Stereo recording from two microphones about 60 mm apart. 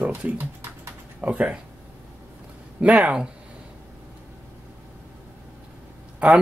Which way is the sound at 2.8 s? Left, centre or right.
Right.